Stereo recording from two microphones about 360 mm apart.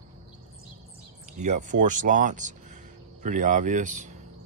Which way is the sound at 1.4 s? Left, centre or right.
Centre.